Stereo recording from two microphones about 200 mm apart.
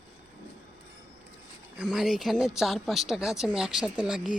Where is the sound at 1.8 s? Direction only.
Centre (ahead or behind).